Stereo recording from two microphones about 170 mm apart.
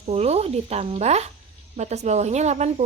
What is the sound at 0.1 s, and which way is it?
Speech, 40° right (ahead or behind).